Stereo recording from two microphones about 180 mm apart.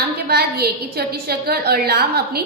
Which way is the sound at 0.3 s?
65° right (ahead or behind).